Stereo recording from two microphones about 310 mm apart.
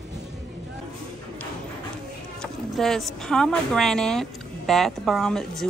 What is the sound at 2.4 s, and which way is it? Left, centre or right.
Speech, centre.